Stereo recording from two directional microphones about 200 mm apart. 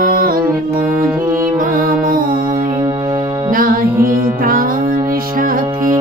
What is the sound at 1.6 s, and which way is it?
Music, 45° right (ahead or behind).